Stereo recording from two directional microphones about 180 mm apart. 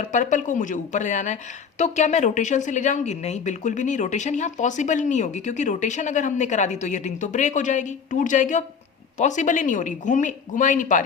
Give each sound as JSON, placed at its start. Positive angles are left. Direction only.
{"t": 0.1, "sound": "speech", "side_deg": 45}